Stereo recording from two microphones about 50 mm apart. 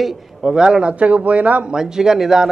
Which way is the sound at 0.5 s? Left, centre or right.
Centre.